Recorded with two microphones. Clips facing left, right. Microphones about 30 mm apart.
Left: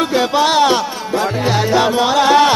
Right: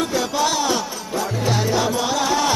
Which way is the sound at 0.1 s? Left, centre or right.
Left.